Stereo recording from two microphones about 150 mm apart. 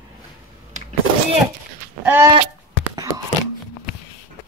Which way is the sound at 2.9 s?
25° right (ahead or behind).